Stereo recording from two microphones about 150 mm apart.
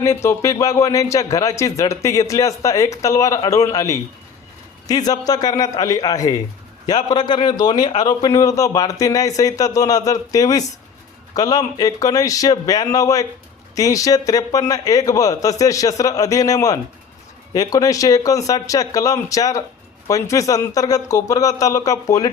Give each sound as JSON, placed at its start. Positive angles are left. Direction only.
{"t": 0.0, "sound": "speech", "side_deg": 20}